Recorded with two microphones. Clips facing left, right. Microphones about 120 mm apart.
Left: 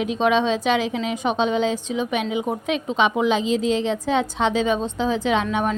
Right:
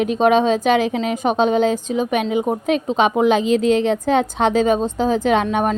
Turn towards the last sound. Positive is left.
turn(degrees=-50)  # may be behind; listen again after turning